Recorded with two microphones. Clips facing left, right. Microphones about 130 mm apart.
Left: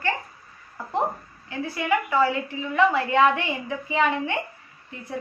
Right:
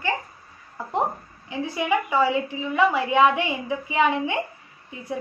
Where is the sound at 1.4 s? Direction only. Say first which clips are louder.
Right 2 dB; 20° right (ahead or behind).